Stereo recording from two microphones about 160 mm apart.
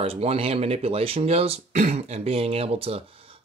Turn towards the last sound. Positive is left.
turn(degrees=-35)  # may be behind; listen again after turning